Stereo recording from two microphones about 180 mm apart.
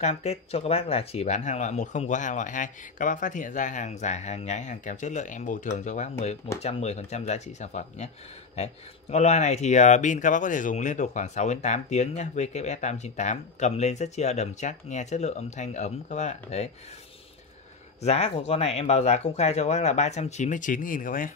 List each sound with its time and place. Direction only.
0.0 s speech: 35° left (ahead or behind)
9.1 s speech: 40° left (ahead or behind)
18.0 s speech: 35° left (ahead or behind)